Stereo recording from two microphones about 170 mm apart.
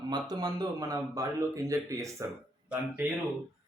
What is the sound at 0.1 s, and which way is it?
A man's voice, 25° right (ahead or behind).